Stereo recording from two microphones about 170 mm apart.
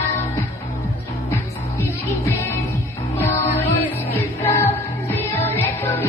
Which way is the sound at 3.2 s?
15° left (ahead or behind).